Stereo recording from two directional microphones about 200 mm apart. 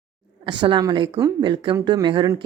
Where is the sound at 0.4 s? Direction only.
25° right (ahead or behind).